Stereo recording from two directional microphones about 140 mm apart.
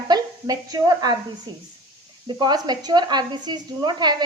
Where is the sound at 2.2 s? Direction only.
30° right (ahead or behind).